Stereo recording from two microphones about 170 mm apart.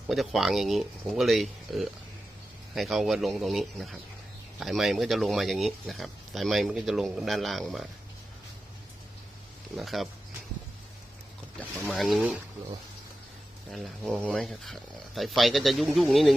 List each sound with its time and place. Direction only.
0.1 s speech: centre (ahead or behind)
9.7 s speech: centre (ahead or behind)
11.6 s speech: 5° left (ahead or behind)
13.7 s speech: centre (ahead or behind)